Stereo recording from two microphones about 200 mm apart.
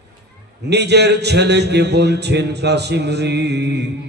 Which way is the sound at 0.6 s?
55° right (ahead or behind).